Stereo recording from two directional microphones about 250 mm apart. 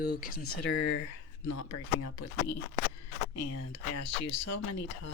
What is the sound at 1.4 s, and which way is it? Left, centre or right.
Speech, left.